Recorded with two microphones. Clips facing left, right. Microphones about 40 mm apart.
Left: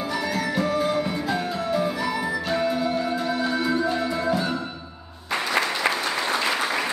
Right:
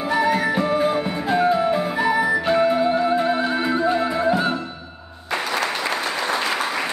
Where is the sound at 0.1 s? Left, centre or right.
Right.